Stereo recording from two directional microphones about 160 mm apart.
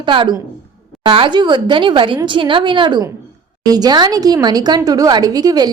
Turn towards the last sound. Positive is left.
turn(degrees=-25)  # may be behind; listen again after turning